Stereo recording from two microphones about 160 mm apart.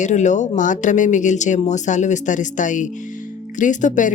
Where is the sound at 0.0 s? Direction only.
50° left (ahead or behind).